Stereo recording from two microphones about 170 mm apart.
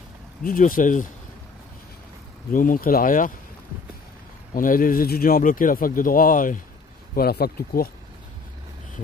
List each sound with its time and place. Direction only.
0.4 s speech: 55° left (ahead or behind)
2.5 s speech: 55° left (ahead or behind)
4.6 s speech: 55° left (ahead or behind)
7.2 s speech: 65° left (ahead or behind)